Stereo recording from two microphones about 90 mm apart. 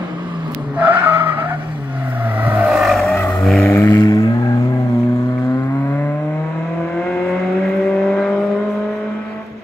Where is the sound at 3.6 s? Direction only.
25° left (ahead or behind).